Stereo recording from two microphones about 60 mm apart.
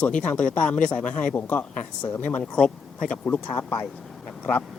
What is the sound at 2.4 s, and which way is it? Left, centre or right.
Speech, centre.